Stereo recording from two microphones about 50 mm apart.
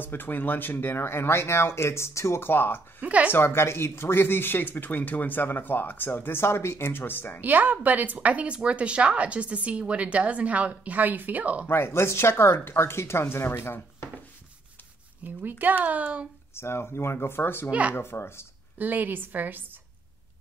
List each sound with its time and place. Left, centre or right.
0.0 s speech: left
2.4 s speech: left
3.0 s a woman's voice: right
3.3 s speech: left
7.4 s a woman's voice: right
11.6 s speech: left
15.2 s a woman's voice: right
16.5 s speech: left
17.6 s a woman's voice: right
17.9 s speech: left
18.8 s a woman's voice: right